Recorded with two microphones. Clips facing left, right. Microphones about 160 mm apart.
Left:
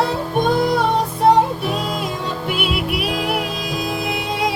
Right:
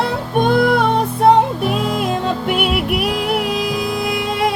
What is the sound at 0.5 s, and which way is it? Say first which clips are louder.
Music: right 3 dB; 60° right (ahead or behind).